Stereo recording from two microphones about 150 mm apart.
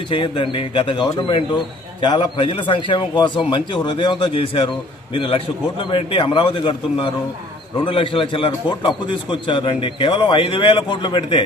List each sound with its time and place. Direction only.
0.1 s a man's voice: 35° left (ahead or behind)